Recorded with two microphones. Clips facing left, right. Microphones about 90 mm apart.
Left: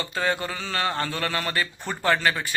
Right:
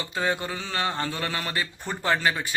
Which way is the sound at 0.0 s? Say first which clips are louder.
Left 1 dB; 15° right (ahead or behind).